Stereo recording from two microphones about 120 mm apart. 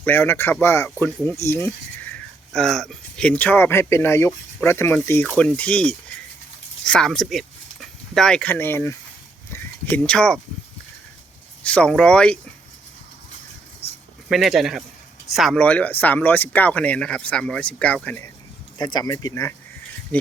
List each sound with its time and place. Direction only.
0.0 s speech: 15° left (ahead or behind)
11.6 s speech: 10° left (ahead or behind)
14.3 s speech: centre (ahead or behind)
15.5 s speech: 10° left (ahead or behind)
18.8 s speech: 35° left (ahead or behind); by 19.5 s 20° left (ahead or behind)